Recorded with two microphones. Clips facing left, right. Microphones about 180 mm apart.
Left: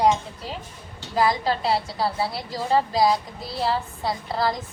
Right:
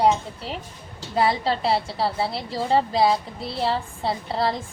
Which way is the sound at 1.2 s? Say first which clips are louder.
Even; 30° right (ahead or behind).